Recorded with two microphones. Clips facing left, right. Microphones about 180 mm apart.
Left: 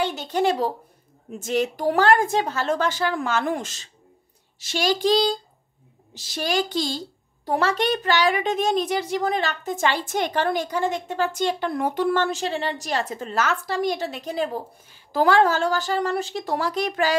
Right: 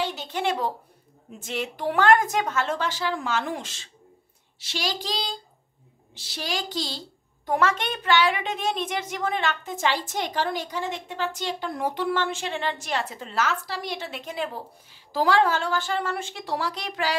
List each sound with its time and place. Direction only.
0.0 s a woman's voice: 40° left (ahead or behind)
7.4 s a child's voice: 30° left (ahead or behind); by 17.1 s 50° left (ahead or behind)